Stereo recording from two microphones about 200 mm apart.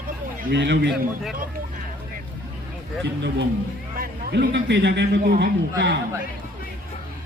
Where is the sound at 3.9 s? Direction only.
50° right (ahead or behind).